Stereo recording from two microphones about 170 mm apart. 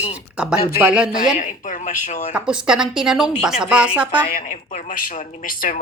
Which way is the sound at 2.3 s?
5° right (ahead or behind).